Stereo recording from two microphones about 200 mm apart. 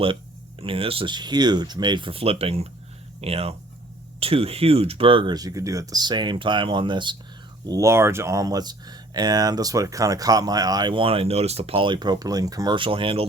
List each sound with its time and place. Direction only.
0.6 s speech: 25° right (ahead or behind)